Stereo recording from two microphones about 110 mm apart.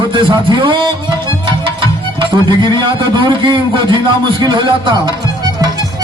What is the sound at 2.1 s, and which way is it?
A man's voice, 45° right (ahead or behind).